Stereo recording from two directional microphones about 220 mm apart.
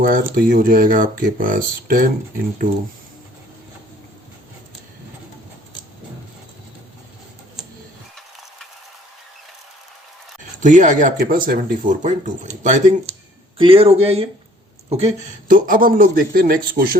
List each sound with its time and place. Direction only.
0.0 s speech: 40° right (ahead or behind)
10.6 s speech: 35° right (ahead or behind)